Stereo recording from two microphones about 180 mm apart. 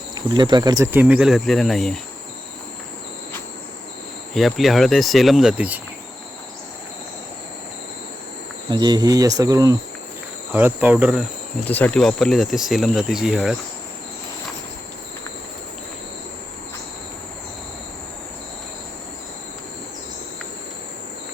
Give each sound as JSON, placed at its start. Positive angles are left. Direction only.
{"t": 0.1, "sound": "speech", "side_deg": -25}
{"t": 4.4, "sound": "speech", "side_deg": 0}
{"t": 8.7, "sound": "speech", "side_deg": -20}
{"t": 11.6, "sound": "speech", "side_deg": 10}